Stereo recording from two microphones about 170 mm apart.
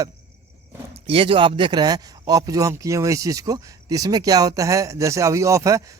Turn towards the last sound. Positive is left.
turn(degrees=-20)  # may be behind; listen again after turning